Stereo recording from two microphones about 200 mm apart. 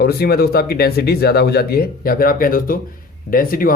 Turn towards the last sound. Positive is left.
turn(degrees=45)  # may be behind; listen again after turning